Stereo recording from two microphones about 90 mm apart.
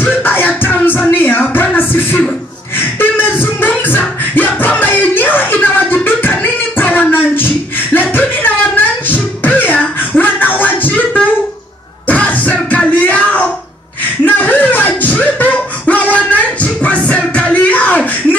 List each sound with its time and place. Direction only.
0.0 s music: 20° left (ahead or behind)
2.8 s a sound: 20° left (ahead or behind)
4.4 s music: 20° left (ahead or behind)
14.2 s beatboxing: 20° left (ahead or behind)